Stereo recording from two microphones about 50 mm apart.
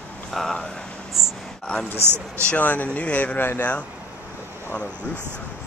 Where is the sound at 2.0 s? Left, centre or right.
Right.